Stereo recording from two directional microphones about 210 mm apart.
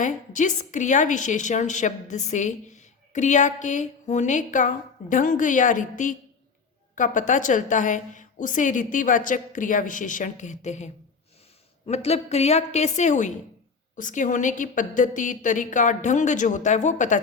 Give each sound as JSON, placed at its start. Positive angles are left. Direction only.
{"t": 0.0, "sound": "a woman's voice", "side_deg": 35}